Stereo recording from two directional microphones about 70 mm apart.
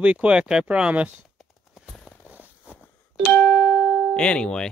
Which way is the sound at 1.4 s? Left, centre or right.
Centre.